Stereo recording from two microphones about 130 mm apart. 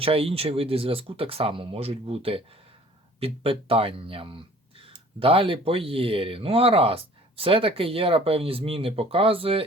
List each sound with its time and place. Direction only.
0.0 s speech: 45° right (ahead or behind)